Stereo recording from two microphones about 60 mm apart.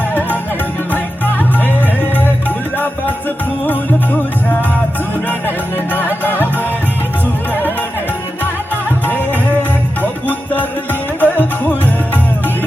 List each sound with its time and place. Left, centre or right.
0.1 s music: left
2.7 s music: left
5.3 s music: left
8.7 s music: left
10.2 s music: left